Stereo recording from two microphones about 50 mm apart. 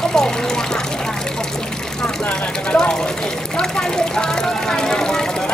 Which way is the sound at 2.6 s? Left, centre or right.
Centre.